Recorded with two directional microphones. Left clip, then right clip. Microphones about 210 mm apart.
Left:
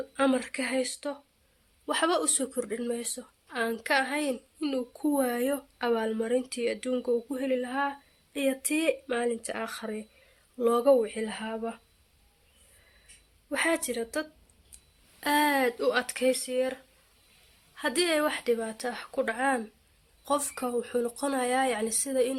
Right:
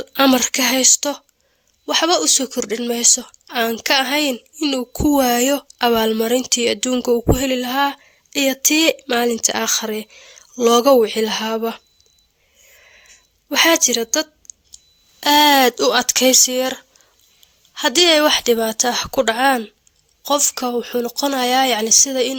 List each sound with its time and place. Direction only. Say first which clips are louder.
0.1 s a woman's voice: right 13 dB; 50° right (ahead or behind)
1.9 s a woman's voice: right 11 dB; 40° right (ahead or behind); by 11.8 s 55° right (ahead or behind)
13.5 s a woman's voice: right 14 dB; 50° right (ahead or behind)
17.7 s a woman's voice: right 13 dB; 45° right (ahead or behind)
20.2 s speech: right 11 dB; 40° right (ahead or behind)